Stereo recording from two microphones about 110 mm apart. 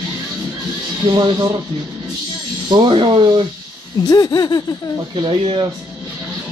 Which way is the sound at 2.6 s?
40° right (ahead or behind).